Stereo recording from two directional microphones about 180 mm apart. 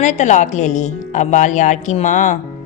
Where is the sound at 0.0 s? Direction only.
40° left (ahead or behind).